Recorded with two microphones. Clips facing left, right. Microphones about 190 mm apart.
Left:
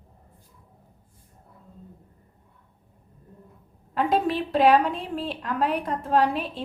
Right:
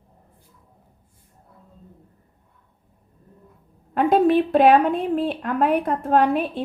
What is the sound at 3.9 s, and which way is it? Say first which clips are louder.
A woman's voice: right 7 dB; 55° right (ahead or behind).